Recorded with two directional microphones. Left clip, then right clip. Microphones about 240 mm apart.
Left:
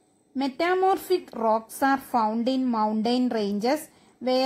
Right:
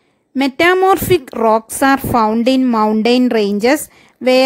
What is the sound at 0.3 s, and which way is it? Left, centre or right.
A woman's voice, right.